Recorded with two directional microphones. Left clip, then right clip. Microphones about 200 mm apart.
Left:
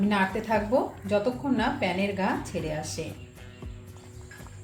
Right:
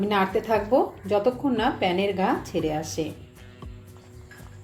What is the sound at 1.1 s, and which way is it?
Speech, 40° right (ahead or behind).